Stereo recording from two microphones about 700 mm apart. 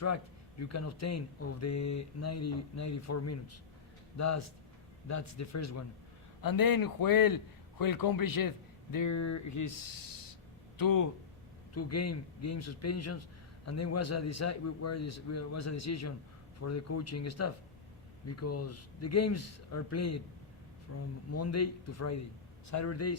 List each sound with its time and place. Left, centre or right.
0.6 s a man's voice: left
10.8 s a man's voice: left